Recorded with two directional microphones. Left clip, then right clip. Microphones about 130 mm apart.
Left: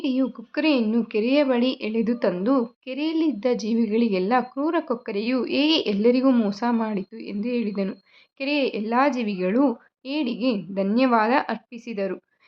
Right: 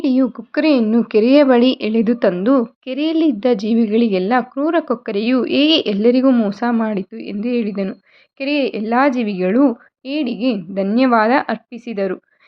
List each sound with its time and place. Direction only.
0.0 s a woman's voice: 45° right (ahead or behind)
1.0 s a woman's voice: 65° right (ahead or behind); by 12.2 s 35° right (ahead or behind)